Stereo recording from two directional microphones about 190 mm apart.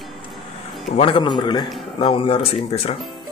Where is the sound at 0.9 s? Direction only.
25° left (ahead or behind).